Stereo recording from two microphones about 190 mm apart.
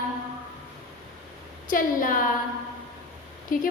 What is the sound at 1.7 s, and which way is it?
Speech, 45° left (ahead or behind).